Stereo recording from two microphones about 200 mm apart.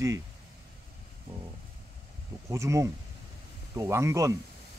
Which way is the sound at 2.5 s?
15° right (ahead or behind).